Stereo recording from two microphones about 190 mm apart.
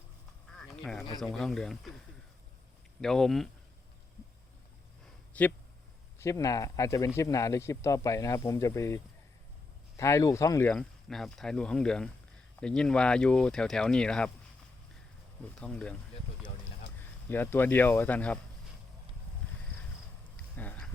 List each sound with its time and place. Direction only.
0.6 s duck: 5° left (ahead or behind)
1.2 s speech: centre (ahead or behind)
3.0 s speech: centre (ahead or behind)
5.3 s speech: 10° left (ahead or behind)
10.0 s speech: 15° left (ahead or behind)
10.7 s speech: 5° left (ahead or behind)
15.5 s speech: 5° left (ahead or behind)
17.2 s speech: 10° left (ahead or behind)
20.3 s a sound: 10° left (ahead or behind)